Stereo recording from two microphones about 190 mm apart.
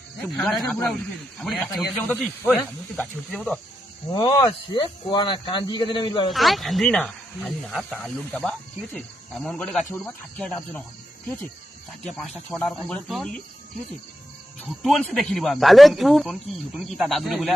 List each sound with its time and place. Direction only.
0.3 s speech: 5° left (ahead or behind)
4.1 s speech: 25° left (ahead or behind)
6.3 s speech: centre (ahead or behind)
12.0 s speech: 5° left (ahead or behind)
14.8 s speech: centre (ahead or behind)